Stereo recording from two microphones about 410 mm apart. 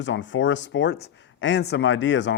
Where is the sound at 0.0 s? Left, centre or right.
Left.